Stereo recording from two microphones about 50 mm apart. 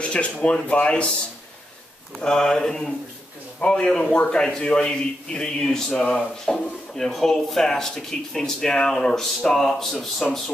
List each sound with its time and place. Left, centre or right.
0.0 s speech: left
2.2 s speech: centre